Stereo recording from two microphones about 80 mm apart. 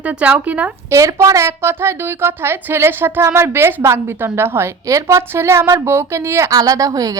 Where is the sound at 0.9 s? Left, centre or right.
Right.